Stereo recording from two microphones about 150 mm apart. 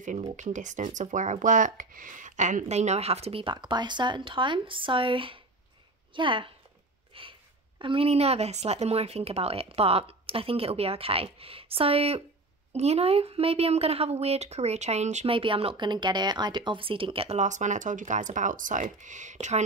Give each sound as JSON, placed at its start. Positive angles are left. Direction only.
{"t": 0.0, "sound": "a woman's voice", "side_deg": -55}
{"t": 7.1, "sound": "sniff", "side_deg": -35}
{"t": 7.8, "sound": "a woman's voice", "side_deg": -40}
{"t": 15.3, "sound": "a woman's voice", "side_deg": -35}
{"t": 17.4, "sound": "speech", "side_deg": -55}